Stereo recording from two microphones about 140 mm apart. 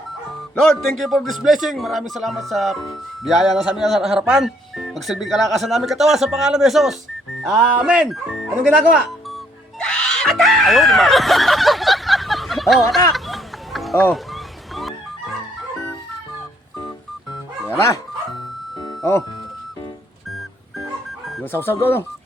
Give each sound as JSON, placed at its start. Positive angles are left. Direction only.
{"t": 0.6, "sound": "speech", "side_deg": 5}
{"t": 9.8, "sound": "screaming", "side_deg": 5}
{"t": 13.1, "sound": "music", "side_deg": 0}
{"t": 17.7, "sound": "speech", "side_deg": 20}
{"t": 18.8, "sound": "music", "side_deg": 25}
{"t": 21.4, "sound": "speech", "side_deg": 15}